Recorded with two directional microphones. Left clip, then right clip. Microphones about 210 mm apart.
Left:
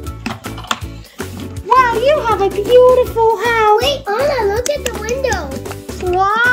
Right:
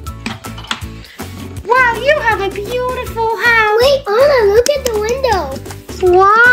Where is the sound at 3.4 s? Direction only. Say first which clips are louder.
Right 4 dB; 10° left (ahead or behind).